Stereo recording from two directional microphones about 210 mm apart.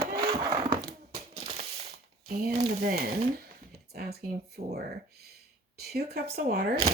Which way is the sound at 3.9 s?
50° right (ahead or behind).